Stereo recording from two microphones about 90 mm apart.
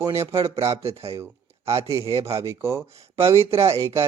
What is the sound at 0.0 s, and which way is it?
Speech, 30° right (ahead or behind).